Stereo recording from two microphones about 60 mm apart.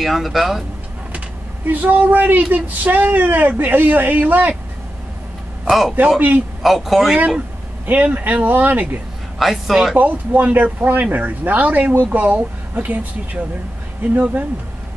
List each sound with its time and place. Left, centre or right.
0.0 s speech: centre
1.7 s speech: right
5.7 s speech: centre
7.8 s speech: right
9.4 s speech: centre
9.9 s speech: right